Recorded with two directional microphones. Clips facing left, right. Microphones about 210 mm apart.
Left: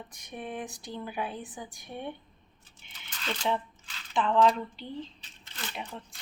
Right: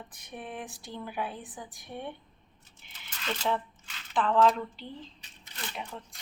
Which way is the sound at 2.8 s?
5° right (ahead or behind).